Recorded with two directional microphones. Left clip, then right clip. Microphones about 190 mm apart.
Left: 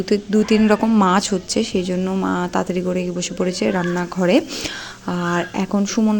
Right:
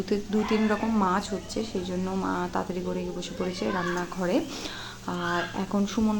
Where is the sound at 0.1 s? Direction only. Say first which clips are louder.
Left 10 dB; 40° left (ahead or behind).